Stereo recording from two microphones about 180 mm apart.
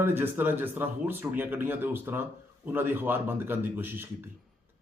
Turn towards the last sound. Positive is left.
turn(degrees=-10)  # may be behind; listen again after turning